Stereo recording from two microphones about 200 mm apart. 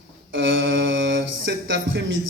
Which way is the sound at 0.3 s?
65° right (ahead or behind).